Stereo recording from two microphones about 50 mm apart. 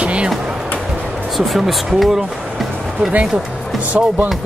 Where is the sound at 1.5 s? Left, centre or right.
Centre.